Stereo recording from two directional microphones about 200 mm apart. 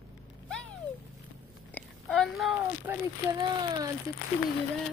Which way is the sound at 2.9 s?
10° right (ahead or behind).